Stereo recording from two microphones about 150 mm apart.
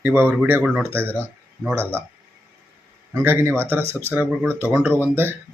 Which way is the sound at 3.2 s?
15° right (ahead or behind).